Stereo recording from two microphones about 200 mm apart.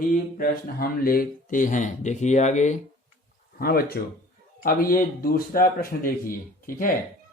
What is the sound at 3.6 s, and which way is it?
Speech, 50° left (ahead or behind).